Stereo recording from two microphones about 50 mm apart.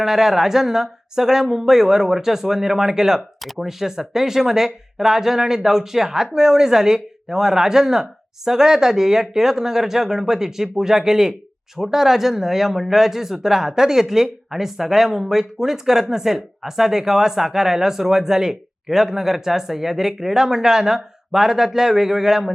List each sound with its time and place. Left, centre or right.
0.0 s speech: centre